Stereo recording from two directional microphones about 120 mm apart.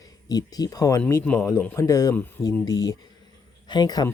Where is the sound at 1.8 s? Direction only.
30° left (ahead or behind).